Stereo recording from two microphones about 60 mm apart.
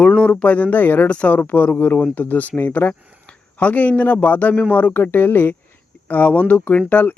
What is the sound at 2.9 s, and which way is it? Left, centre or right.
A man's voice, left.